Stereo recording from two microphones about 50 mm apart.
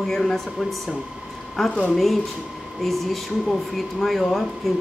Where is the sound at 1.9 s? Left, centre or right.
Centre.